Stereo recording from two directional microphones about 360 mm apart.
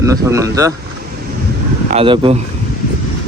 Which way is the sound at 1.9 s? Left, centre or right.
Centre.